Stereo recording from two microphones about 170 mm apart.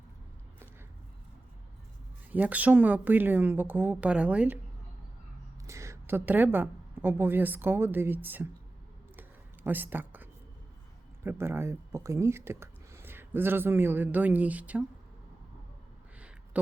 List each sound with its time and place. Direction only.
2.3 s speech: 10° right (ahead or behind)
5.6 s a woman's voice: 15° right (ahead or behind)
9.6 s speech: 10° right (ahead or behind)
16.1 s a sound: 10° right (ahead or behind)